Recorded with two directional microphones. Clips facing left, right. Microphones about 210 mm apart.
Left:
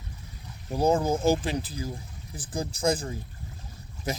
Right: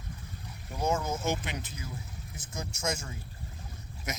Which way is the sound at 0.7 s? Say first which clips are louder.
Left 7 dB; 35° left (ahead or behind).